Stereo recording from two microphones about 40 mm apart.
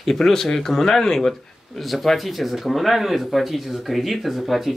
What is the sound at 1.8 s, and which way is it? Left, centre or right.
Speech, centre.